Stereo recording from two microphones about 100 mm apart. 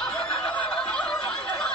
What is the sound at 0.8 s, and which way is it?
Snicker, 5° left (ahead or behind).